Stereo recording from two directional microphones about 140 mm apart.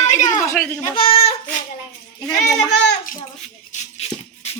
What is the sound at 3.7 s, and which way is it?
Music, 50° left (ahead or behind).